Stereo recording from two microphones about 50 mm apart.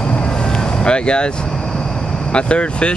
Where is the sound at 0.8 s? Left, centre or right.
Centre.